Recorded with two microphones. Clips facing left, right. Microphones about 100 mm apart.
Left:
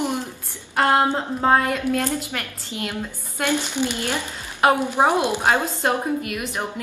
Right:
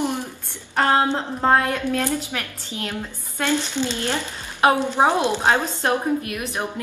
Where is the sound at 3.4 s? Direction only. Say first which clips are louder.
Even; 15° left (ahead or behind).